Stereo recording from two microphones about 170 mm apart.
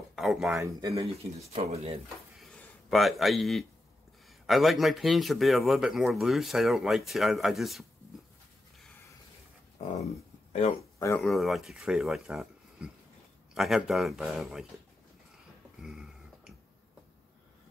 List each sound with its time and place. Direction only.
0.1 s speech: centre (ahead or behind)
0.6 s speech: 20° right (ahead or behind)
0.9 s speech: 35° right (ahead or behind)
2.4 s a sound: centre (ahead or behind)
4.5 s speech: centre (ahead or behind)
10.8 s speech: 15° left (ahead or behind)
11.1 s speech: centre (ahead or behind)
15.8 s a sound: 5° right (ahead or behind)